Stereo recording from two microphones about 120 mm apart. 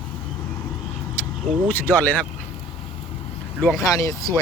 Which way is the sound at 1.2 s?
10° left (ahead or behind).